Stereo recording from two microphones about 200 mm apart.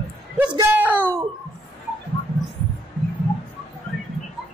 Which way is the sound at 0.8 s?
10° right (ahead or behind).